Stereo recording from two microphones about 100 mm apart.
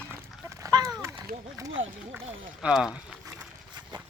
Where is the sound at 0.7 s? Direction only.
40° right (ahead or behind).